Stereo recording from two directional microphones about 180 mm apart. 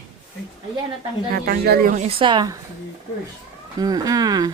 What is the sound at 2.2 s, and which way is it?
Speech, 25° right (ahead or behind).